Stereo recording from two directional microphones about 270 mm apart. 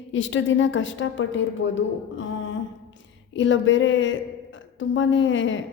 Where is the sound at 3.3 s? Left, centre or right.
Left.